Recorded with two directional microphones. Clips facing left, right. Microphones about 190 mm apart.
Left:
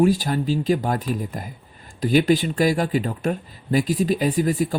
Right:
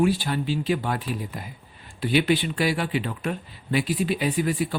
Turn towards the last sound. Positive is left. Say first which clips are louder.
# left 4 dB
turn(degrees=45)  # may be behind; listen again after turning